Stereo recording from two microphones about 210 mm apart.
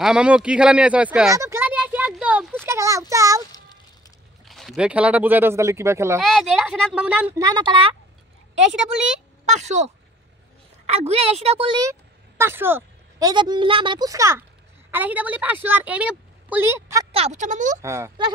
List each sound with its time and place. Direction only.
0.0 s speech: 5° right (ahead or behind)
1.3 s a sound: 15° right (ahead or behind)
4.5 s speech: centre (ahead or behind)
6.2 s speech: centre (ahead or behind)
7.3 s speech: 20° right (ahead or behind)
9.5 s speech: 35° right (ahead or behind)
10.9 s a woman's voice: 30° right (ahead or behind); by 17.1 s 15° right (ahead or behind)
17.1 s speech: 30° right (ahead or behind)
17.8 s speech: 15° right (ahead or behind)